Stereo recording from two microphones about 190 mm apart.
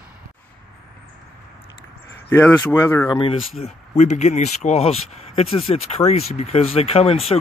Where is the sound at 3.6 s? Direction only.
40° left (ahead or behind).